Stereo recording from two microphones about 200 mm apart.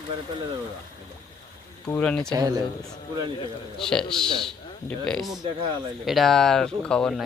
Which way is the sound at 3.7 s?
5° left (ahead or behind).